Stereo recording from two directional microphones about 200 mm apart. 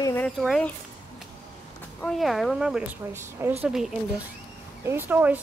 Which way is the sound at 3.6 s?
Centre (ahead or behind).